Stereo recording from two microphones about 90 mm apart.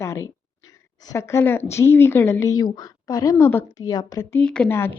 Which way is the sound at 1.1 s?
30° left (ahead or behind).